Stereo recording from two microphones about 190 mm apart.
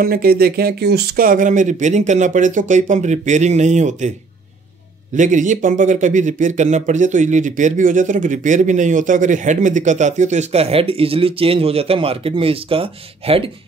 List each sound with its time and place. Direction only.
0.0 s speech: 50° right (ahead or behind)
5.1 s speech: 40° right (ahead or behind)